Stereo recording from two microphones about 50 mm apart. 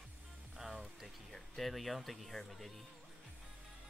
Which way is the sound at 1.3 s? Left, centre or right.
Centre.